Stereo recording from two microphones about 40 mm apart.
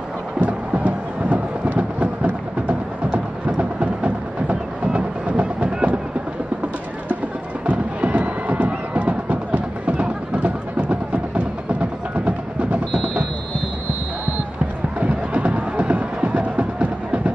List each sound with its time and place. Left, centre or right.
0.4 s a sound: right
3.1 s music: right
7.6 s music: right
15.0 s music: right